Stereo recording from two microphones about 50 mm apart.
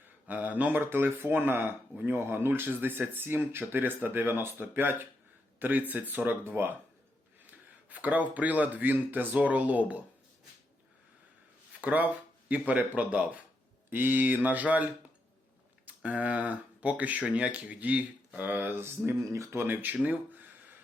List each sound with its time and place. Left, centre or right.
0.3 s speech: right
0.8 s speech: right
7.9 s speech: right
11.8 s speech: right
13.9 s speech: right
16.0 s speech: right
18.8 s speech: right
19.2 s speech: right
19.6 s speech: right